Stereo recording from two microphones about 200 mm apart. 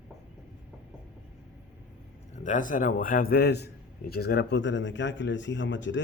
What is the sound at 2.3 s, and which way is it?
A man's voice, 40° left (ahead or behind).